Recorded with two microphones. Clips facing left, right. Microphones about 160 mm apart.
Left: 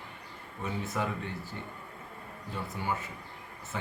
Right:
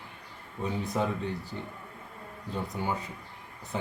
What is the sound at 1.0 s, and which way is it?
Speech, 25° right (ahead or behind).